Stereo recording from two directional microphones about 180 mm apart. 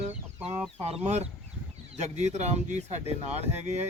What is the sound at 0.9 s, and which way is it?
Speech, 35° right (ahead or behind).